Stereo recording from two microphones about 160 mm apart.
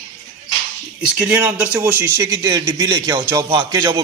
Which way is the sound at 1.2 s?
10° right (ahead or behind).